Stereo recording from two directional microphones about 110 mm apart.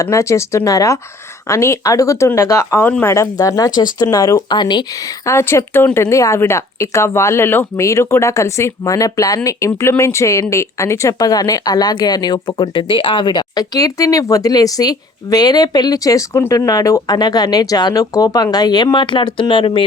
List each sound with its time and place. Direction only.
0.0 s speech: 30° left (ahead or behind)
5.2 s speech: 25° left (ahead or behind); by 19.8 s 50° left (ahead or behind)